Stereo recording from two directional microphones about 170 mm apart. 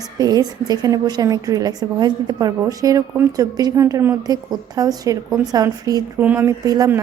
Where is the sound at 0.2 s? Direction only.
20° right (ahead or behind).